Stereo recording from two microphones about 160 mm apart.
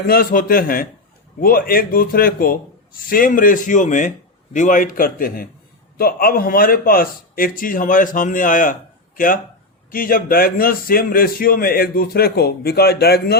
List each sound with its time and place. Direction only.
0.1 s a man's voice: 65° left (ahead or behind); by 13.3 s 85° left